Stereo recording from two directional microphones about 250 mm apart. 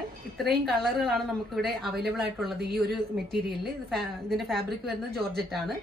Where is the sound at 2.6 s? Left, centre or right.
Right.